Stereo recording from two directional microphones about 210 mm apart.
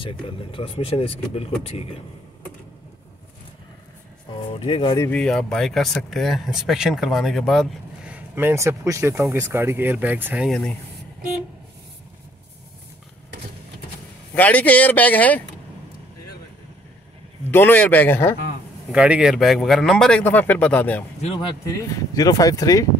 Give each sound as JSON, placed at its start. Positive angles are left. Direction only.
{"t": 0.0, "sound": "speech", "side_deg": 25}
{"t": 4.6, "sound": "speech", "side_deg": 25}
{"t": 5.1, "sound": "speech", "side_deg": 5}
{"t": 14.3, "sound": "speech", "side_deg": 5}
{"t": 17.5, "sound": "speech", "side_deg": 10}
{"t": 18.9, "sound": "speech", "side_deg": -5}
{"t": 21.2, "sound": "speech", "side_deg": 20}